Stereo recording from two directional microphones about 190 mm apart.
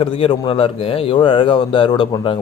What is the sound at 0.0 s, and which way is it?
Speech, 25° left (ahead or behind).